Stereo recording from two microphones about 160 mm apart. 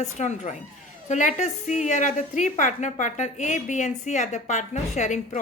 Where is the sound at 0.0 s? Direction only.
45° left (ahead or behind).